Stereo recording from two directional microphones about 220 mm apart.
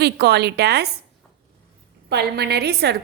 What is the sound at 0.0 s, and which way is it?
Speech, 50° right (ahead or behind).